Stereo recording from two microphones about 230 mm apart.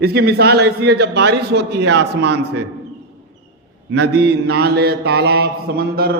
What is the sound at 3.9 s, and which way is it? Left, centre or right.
A man's voice, right.